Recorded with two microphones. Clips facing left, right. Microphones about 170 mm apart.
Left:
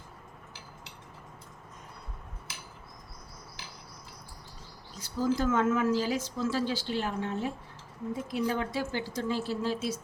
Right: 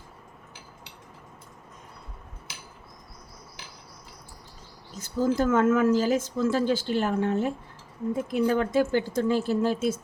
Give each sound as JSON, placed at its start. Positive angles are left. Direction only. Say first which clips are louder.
{"t": 4.9, "sound": "speech", "louder": "right 4 dB", "side_deg": -50}